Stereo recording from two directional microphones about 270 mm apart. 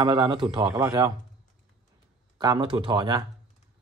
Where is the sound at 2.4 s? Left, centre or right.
Centre.